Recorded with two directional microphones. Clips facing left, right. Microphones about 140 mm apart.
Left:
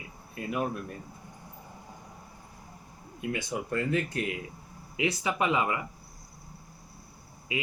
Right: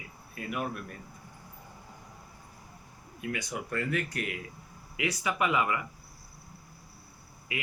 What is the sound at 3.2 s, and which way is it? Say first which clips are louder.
Speech: left 3 dB; 25° left (ahead or behind).